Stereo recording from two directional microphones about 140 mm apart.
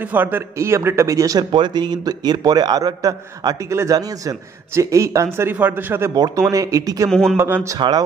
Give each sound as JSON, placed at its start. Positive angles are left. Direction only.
{"t": 0.0, "sound": "a man's voice", "side_deg": -15}
{"t": 6.1, "sound": "a man's voice", "side_deg": -30}
{"t": 7.1, "sound": "speech", "side_deg": 5}
{"t": 7.3, "sound": "a man's voice", "side_deg": -15}